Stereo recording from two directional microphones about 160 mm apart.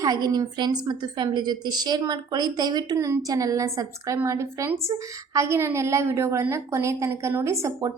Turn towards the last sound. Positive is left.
turn(degrees=-20)  # may be behind; listen again after turning